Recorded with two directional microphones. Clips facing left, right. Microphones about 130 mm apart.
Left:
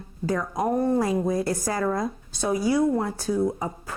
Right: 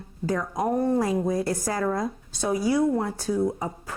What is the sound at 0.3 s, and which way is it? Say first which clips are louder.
Speech: left 1 dB; 25° left (ahead or behind).